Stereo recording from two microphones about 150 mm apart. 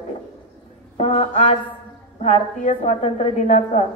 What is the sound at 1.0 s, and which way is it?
A woman's voice, 50° left (ahead or behind).